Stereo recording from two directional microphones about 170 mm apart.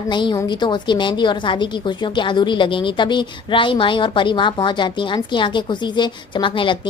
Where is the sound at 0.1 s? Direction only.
25° left (ahead or behind).